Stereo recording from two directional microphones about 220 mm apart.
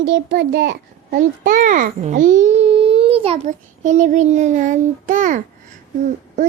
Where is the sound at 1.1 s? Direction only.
40° right (ahead or behind).